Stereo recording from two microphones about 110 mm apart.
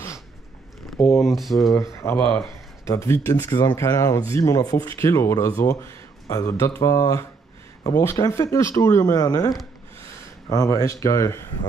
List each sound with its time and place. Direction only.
0.9 s speech: 25° left (ahead or behind)
1.2 s speech: centre (ahead or behind)
1.8 s speech: 30° left (ahead or behind)
10.5 s speech: 30° left (ahead or behind)